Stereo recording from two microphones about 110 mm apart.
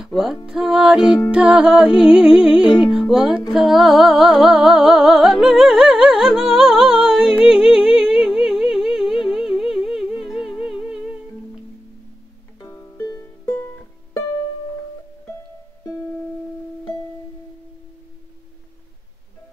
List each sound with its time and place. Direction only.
0.0 s music: 5° right (ahead or behind)
12.5 s music: 25° left (ahead or behind)